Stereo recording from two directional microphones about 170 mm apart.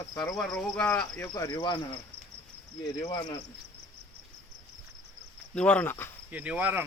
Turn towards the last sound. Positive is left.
turn(degrees=-10)  # may be behind; listen again after turning